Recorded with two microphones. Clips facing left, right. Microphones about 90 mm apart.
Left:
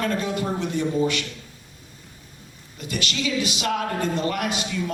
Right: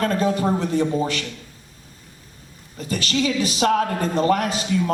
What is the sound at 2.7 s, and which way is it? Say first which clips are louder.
A man's voice: right 5 dB; 35° right (ahead or behind).